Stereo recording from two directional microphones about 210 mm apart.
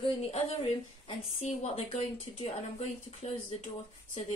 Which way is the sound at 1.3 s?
30° left (ahead or behind).